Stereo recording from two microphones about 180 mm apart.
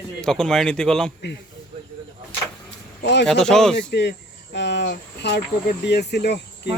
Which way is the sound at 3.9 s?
70° left (ahead or behind).